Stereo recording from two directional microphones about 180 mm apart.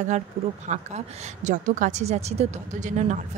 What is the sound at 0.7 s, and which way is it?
A woman's voice, 40° right (ahead or behind).